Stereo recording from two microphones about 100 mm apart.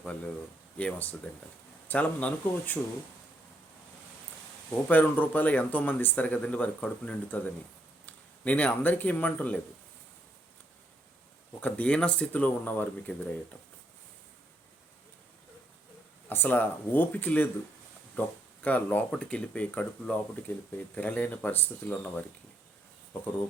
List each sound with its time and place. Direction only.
0.8 s speech: 15° left (ahead or behind)
4.7 s speech: 15° left (ahead or behind)
11.6 s speech: 15° left (ahead or behind)
16.3 s speech: 20° left (ahead or behind)